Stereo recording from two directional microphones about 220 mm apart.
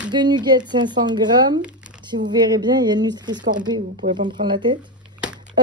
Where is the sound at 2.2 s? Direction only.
30° right (ahead or behind).